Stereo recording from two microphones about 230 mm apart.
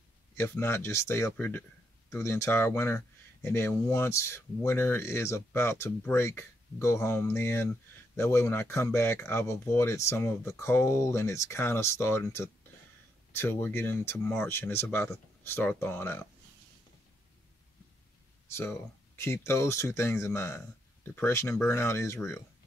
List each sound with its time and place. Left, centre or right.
0.4 s speech: centre
18.5 s speech: centre